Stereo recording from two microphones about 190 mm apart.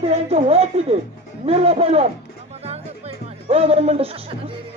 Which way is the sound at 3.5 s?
30° right (ahead or behind).